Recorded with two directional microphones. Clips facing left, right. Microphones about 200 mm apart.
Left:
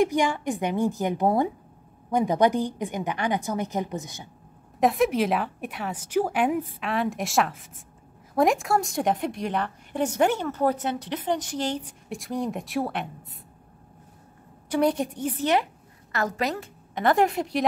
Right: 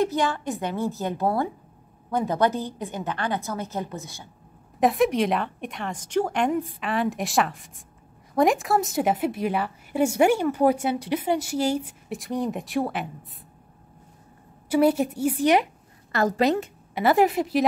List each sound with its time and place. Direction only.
0.0 s a woman's voice: 15° left (ahead or behind)
4.7 s a woman's voice: centre (ahead or behind)
14.7 s a woman's voice: 5° right (ahead or behind)
16.1 s a woman's voice: 35° right (ahead or behind)
16.9 s a woman's voice: 5° right (ahead or behind)